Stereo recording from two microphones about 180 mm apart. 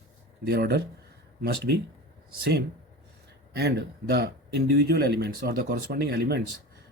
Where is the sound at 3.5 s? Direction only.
65° right (ahead or behind).